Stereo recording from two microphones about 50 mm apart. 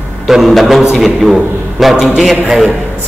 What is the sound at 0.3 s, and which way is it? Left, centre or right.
A man's voice, centre.